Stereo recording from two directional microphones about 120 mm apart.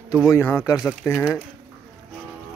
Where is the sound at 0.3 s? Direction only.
20° left (ahead or behind).